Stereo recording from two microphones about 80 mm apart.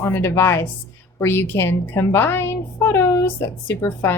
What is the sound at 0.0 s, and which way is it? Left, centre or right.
A woman's voice, left.